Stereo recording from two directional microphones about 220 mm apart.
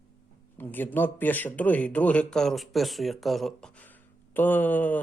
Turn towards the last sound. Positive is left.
turn(degrees=5)  # may be behind; listen again after turning